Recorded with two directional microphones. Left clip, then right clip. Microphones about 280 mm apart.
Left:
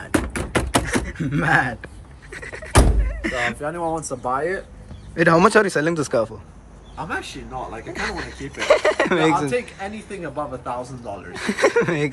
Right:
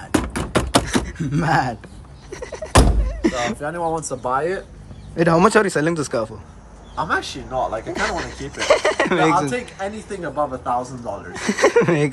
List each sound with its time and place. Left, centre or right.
0.0 s a sound: centre
3.2 s music: centre
3.6 s a man's voice: centre